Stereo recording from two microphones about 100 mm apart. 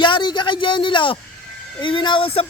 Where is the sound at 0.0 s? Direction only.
50° left (ahead or behind).